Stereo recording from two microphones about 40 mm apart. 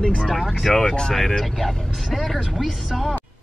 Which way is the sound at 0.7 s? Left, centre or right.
Centre.